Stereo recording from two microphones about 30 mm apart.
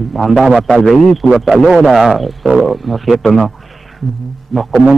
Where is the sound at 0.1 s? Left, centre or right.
Centre.